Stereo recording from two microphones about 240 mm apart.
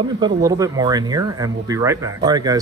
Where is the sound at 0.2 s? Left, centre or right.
Centre.